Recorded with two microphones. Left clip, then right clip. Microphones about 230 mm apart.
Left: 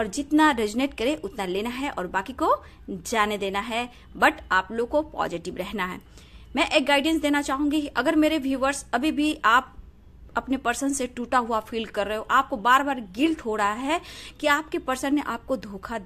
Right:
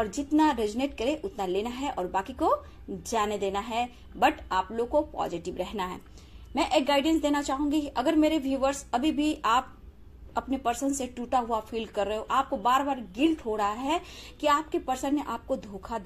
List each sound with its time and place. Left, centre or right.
0.0 s a woman's voice: left